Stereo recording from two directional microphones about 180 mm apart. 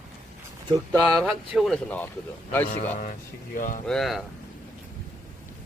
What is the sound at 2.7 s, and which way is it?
Speech, 50° left (ahead or behind).